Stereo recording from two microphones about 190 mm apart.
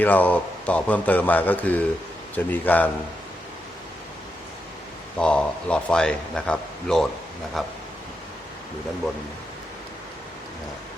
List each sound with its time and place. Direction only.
0.0 s a man's voice: 10° left (ahead or behind)
5.1 s a man's voice: 5° left (ahead or behind)